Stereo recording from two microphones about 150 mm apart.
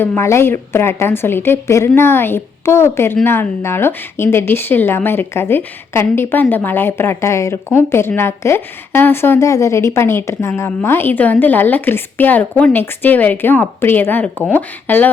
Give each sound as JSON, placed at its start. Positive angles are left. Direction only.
{"t": 0.0, "sound": "speech", "side_deg": 15}